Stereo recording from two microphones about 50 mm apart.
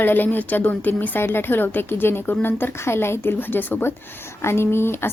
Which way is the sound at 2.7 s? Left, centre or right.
Left.